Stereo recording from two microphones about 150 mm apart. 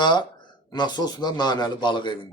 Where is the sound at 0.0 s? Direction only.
30° left (ahead or behind).